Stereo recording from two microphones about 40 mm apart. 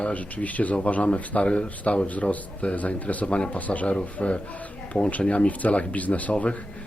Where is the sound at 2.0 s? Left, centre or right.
Left.